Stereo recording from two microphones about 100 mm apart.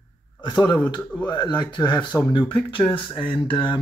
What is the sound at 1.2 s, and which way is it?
Speech, 50° left (ahead or behind).